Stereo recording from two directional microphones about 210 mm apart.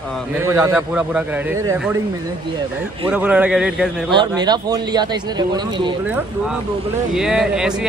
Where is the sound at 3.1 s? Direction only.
5° right (ahead or behind).